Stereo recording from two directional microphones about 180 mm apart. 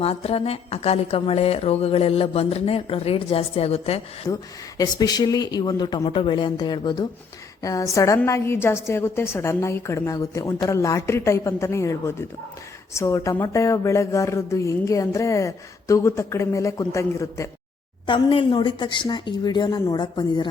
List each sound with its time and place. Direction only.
0.0 s a woman's voice: 35° left (ahead or behind)
4.8 s speech: 20° left (ahead or behind)
18.0 s speech: 30° left (ahead or behind)